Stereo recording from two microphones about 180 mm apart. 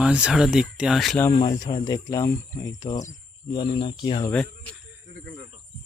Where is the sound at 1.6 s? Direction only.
20° left (ahead or behind).